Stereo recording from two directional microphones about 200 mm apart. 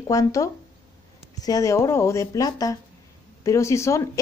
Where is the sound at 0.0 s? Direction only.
15° left (ahead or behind).